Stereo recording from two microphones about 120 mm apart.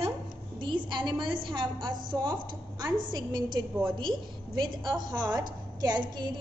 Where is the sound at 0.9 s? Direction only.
40° right (ahead or behind).